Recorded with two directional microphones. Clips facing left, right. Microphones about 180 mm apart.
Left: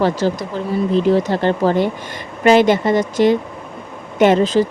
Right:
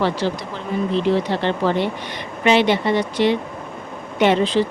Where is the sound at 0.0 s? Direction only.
45° left (ahead or behind).